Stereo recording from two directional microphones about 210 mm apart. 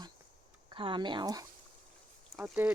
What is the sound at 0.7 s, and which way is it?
Speech, 25° right (ahead or behind).